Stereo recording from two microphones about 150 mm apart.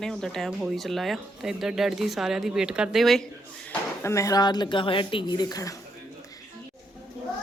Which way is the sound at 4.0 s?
20° left (ahead or behind).